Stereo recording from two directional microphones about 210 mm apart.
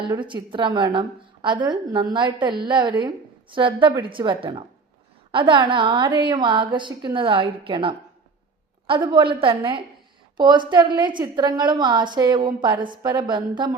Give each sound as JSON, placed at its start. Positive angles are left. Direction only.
{"t": 0.0, "sound": "a woman's voice", "side_deg": -25}